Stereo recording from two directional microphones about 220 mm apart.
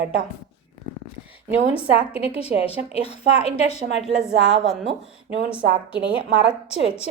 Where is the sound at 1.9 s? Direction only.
25° left (ahead or behind).